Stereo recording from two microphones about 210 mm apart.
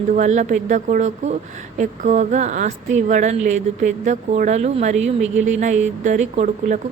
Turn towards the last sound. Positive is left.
turn(degrees=-35)  # may be behind; listen again after turning